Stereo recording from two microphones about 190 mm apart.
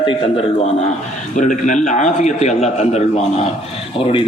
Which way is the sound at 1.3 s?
40° left (ahead or behind).